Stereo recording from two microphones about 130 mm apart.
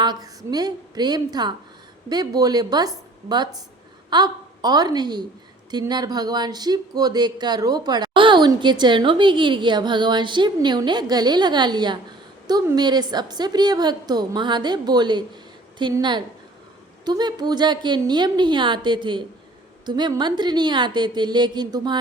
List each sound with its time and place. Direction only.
0.0 s a woman's voice: 30° right (ahead or behind)